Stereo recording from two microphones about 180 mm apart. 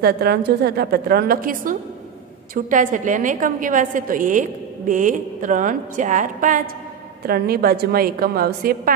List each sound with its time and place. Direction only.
0.0 s a woman's voice: 60° right (ahead or behind); by 6.6 s 45° right (ahead or behind)
7.2 s a woman's voice: 55° right (ahead or behind)